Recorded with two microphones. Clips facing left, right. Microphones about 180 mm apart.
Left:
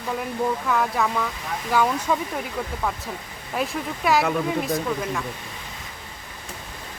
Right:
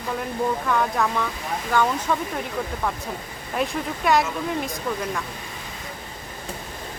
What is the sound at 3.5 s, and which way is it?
Speech, centre (ahead or behind).